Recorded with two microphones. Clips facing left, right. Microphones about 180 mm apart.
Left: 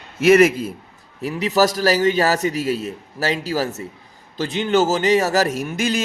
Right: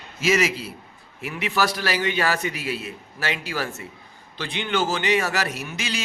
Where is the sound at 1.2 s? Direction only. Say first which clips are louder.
Left 7 dB; 40° left (ahead or behind).